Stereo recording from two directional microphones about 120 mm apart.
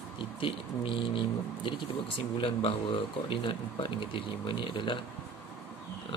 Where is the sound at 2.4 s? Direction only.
50° left (ahead or behind).